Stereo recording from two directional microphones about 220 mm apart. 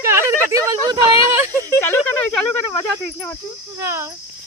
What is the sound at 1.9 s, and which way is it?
Cricket, 5° left (ahead or behind).